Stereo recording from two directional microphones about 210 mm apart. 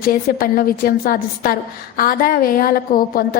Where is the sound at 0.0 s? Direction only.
45° left (ahead or behind).